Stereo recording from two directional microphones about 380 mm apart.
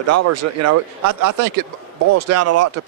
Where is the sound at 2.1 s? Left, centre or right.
Right.